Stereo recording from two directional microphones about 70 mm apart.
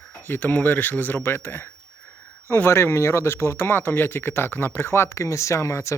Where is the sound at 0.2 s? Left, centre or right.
Left.